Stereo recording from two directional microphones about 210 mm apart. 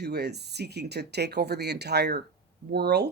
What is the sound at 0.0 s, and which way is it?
Speech, 50° right (ahead or behind).